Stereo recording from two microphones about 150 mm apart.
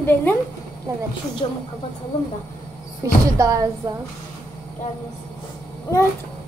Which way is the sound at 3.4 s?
20° right (ahead or behind).